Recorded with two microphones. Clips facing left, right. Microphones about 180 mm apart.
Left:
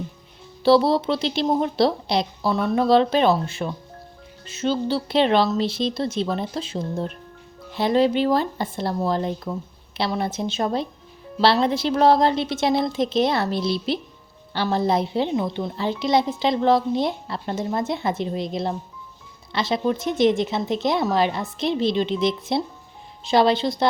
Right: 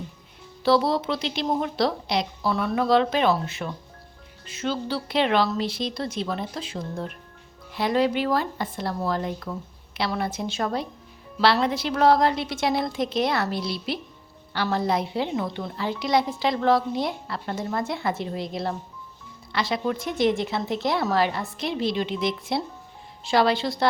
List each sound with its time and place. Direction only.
0.6 s a woman's voice: 30° left (ahead or behind)